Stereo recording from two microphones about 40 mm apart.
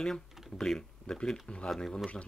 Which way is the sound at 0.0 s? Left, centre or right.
Centre.